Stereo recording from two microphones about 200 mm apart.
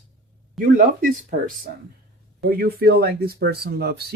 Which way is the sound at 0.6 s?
45° right (ahead or behind).